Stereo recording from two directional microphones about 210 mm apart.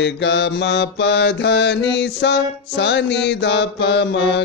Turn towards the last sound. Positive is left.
turn(degrees=55)  # may be behind; listen again after turning